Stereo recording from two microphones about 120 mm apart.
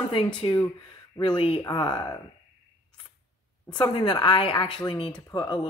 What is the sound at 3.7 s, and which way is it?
Speech, 40° left (ahead or behind).